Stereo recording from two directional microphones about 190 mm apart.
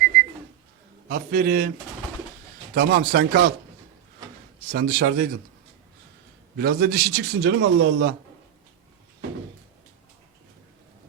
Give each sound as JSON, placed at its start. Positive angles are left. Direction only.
{"t": 1.0, "sound": "a man's voice", "side_deg": -50}
{"t": 2.7, "sound": "a man's voice", "side_deg": -50}
{"t": 4.7, "sound": "a man's voice", "side_deg": -50}
{"t": 6.6, "sound": "a man's voice", "side_deg": -55}